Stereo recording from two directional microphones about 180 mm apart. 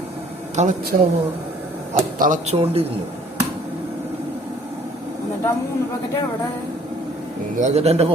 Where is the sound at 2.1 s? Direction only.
45° right (ahead or behind).